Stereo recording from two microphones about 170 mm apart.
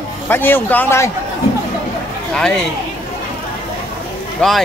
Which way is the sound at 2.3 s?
5° left (ahead or behind).